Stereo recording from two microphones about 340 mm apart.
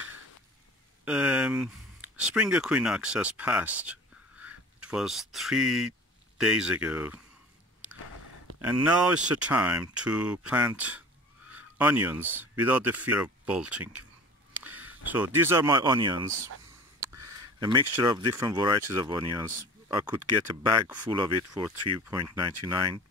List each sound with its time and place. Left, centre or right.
1.0 s speech: centre
8.6 s speech: centre
21.7 s speech: right
22.0 s speech: centre